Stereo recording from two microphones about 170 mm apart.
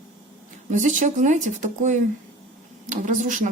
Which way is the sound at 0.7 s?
45° right (ahead or behind).